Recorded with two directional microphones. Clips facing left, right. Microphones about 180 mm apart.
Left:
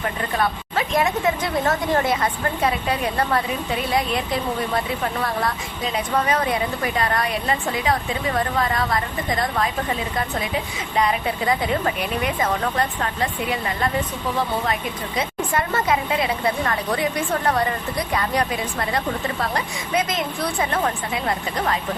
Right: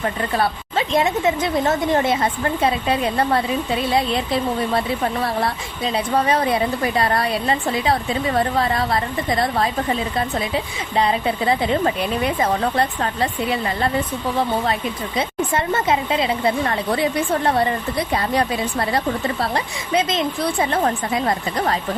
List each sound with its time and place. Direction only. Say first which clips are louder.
0.3 s speech: even; 25° right (ahead or behind)
6.1 s a woman's voice: right 3 dB; 30° right (ahead or behind)
10.9 s a woman's voice: right 2 dB; 30° right (ahead or behind)
15.2 s speech: right 2 dB; 25° right (ahead or behind)
20.8 s a woman's voice: right 4 dB; 35° right (ahead or behind)